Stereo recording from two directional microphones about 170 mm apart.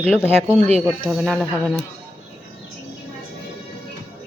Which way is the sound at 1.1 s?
5° right (ahead or behind).